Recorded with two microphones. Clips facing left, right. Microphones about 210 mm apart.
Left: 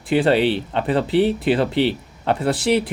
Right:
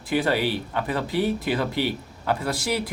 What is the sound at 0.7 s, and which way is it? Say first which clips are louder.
Speech: left 7 dB; 25° left (ahead or behind).